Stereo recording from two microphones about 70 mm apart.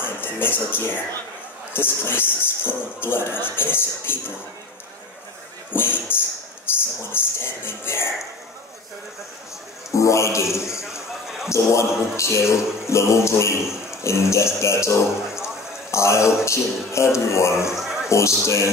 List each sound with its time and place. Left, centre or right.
0.2 s speech: left
5.7 s speech: left
9.8 s music: left
14.0 s a man's voice: left
16.4 s music: left
17.7 s a sound: centre
18.1 s music: left